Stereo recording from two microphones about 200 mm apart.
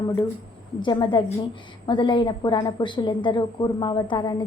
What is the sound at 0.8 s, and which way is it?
A woman's voice, 25° left (ahead or behind).